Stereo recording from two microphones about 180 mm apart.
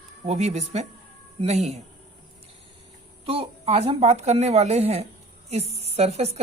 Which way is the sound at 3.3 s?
30° right (ahead or behind).